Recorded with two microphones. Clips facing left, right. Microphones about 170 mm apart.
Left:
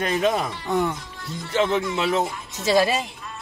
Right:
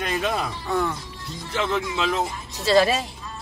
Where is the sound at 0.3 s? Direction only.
20° left (ahead or behind).